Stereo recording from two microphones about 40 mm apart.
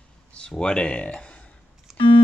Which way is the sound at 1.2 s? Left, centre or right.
Left.